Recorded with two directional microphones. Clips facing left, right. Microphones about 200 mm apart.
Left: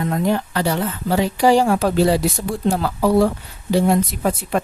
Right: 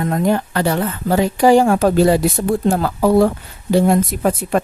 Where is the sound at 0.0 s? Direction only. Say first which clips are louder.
Right 3 dB; 50° right (ahead or behind).